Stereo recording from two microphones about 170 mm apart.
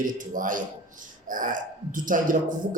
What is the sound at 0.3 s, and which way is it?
Speech, 50° right (ahead or behind).